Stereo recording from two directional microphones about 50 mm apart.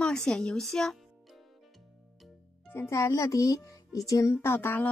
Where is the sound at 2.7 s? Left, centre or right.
Left.